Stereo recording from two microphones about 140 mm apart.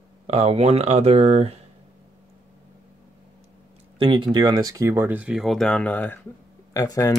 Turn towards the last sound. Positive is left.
turn(degrees=25)  # may be behind; listen again after turning